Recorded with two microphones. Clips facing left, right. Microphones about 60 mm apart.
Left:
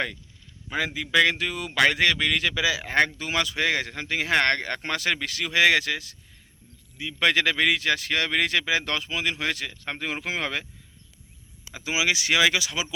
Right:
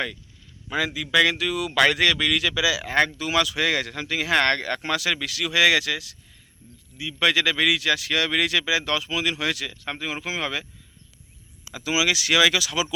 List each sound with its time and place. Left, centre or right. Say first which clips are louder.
0.9 s speech: even; left
11.7 s speech: right 2 dB; left